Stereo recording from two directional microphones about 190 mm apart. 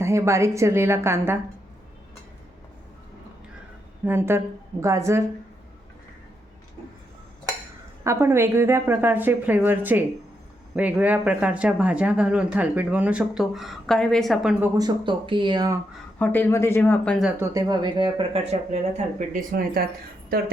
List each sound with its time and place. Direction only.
0.0 s a woman's voice: 15° right (ahead or behind)
4.0 s a woman's voice: 10° right (ahead or behind)
8.0 s a woman's voice: 15° right (ahead or behind); by 14.5 s centre (ahead or behind)
14.6 s speech: 20° right (ahead or behind)
16.1 s speech: 10° left (ahead or behind)
17.4 s speech: 20° right (ahead or behind); by 19.8 s 45° right (ahead or behind)